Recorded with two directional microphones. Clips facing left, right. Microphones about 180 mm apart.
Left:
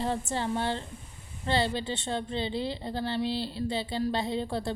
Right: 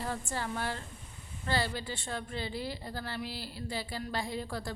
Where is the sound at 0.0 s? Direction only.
25° left (ahead or behind).